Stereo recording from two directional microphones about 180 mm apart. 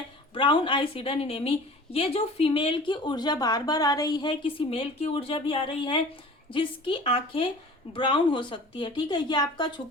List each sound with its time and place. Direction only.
0.3 s a woman's voice: 30° left (ahead or behind)